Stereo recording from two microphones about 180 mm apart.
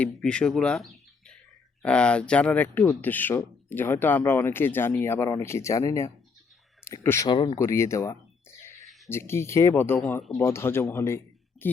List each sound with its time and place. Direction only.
0.0 s speech: 5° left (ahead or behind)